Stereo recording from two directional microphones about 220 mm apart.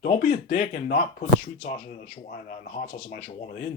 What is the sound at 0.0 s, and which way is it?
Speech, 35° left (ahead or behind).